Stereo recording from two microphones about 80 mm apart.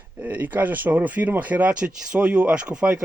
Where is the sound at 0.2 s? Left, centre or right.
Right.